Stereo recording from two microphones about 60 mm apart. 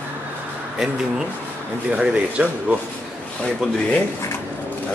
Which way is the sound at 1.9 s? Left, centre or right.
Right.